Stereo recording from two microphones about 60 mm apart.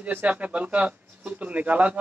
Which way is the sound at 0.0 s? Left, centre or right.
Right.